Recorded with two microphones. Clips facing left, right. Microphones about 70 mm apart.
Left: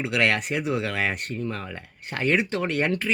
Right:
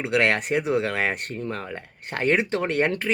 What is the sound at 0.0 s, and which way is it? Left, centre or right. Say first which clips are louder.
Speech: right 2 dB; right.